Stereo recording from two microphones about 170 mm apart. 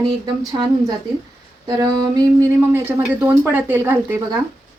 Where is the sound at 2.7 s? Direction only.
10° right (ahead or behind).